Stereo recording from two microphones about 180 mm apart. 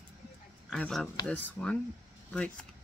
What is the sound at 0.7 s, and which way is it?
Speech, 5° left (ahead or behind).